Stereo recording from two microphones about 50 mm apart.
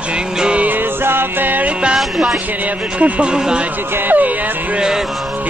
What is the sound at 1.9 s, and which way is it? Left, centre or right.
Music, centre.